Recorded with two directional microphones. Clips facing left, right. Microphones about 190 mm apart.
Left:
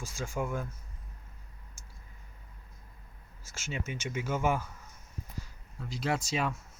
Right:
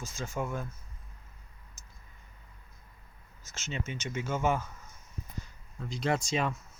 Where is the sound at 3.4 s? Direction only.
10° left (ahead or behind).